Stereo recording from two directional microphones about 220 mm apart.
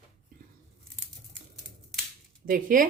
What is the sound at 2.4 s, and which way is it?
Speech, 40° right (ahead or behind).